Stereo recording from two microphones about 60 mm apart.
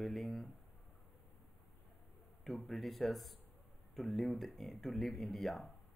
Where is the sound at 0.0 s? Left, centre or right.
Centre.